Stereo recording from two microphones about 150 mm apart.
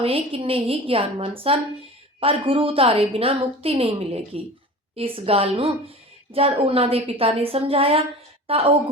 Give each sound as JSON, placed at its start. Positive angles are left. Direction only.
{"t": 0.0, "sound": "a woman's voice", "side_deg": -40}